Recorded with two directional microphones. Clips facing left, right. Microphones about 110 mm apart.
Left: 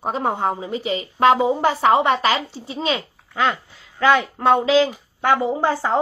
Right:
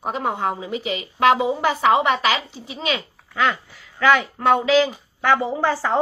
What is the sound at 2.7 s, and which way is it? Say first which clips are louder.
A woman's voice: left 2 dB; 25° left (ahead or behind).